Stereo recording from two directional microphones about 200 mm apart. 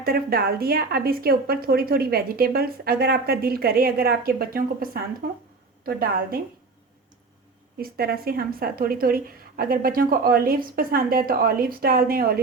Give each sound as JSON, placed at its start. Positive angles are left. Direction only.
{"t": 0.0, "sound": "speech", "side_deg": -50}
{"t": 7.8, "sound": "speech", "side_deg": -50}